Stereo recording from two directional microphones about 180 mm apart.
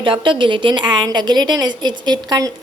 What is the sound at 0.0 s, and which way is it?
A woman's voice, 30° right (ahead or behind).